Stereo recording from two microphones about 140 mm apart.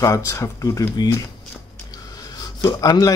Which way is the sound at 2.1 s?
25° left (ahead or behind).